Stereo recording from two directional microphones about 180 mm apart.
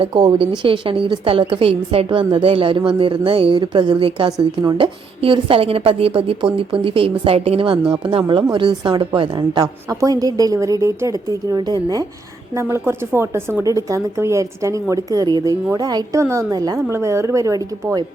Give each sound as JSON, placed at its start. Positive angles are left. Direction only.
{"t": 0.0, "sound": "a woman's voice", "side_deg": -30}